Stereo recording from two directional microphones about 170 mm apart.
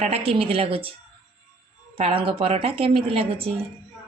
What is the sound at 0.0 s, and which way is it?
Speech, 35° right (ahead or behind).